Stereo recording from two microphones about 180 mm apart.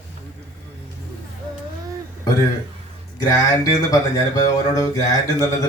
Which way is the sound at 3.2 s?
20° left (ahead or behind).